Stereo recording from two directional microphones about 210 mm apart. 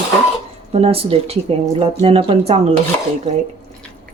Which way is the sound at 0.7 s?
30° right (ahead or behind).